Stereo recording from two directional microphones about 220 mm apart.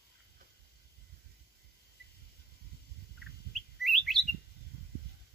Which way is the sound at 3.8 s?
Centre (ahead or behind).